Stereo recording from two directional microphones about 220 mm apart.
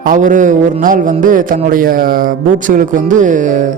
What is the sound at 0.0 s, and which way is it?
Speech, 35° right (ahead or behind).